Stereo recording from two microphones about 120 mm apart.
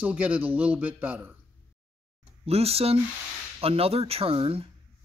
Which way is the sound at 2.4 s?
55° right (ahead or behind).